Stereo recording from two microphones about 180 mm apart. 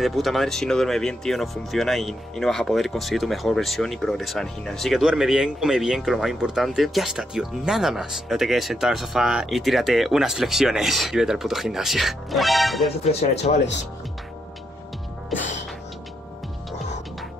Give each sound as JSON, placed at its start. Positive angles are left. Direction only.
{"t": 0.0, "sound": "speech", "side_deg": 0}
{"t": 13.0, "sound": "speech", "side_deg": 35}